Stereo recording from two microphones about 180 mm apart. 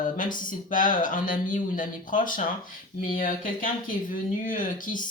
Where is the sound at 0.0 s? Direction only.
50° left (ahead or behind).